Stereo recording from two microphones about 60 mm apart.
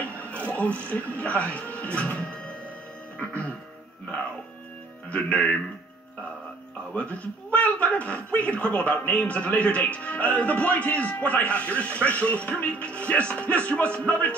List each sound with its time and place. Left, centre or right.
0.0 s television: left
0.5 s a man's voice: left
5.1 s a man's voice: left
6.9 s a man's voice: left